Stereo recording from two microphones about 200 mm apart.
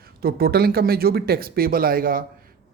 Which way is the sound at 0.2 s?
50° right (ahead or behind).